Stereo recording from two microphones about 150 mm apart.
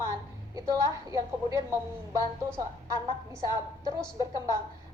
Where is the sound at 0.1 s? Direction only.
20° right (ahead or behind).